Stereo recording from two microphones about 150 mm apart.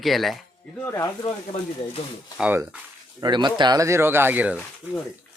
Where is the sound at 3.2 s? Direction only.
30° right (ahead or behind); by 4.6 s 10° right (ahead or behind).